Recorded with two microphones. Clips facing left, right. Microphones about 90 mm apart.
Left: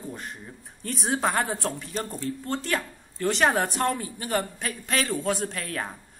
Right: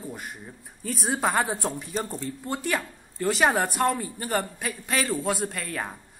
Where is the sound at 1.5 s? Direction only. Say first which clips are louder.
Right 1 dB; 15° right (ahead or behind).